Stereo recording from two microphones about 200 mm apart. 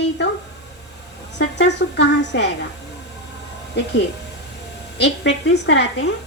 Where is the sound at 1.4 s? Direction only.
60° left (ahead or behind).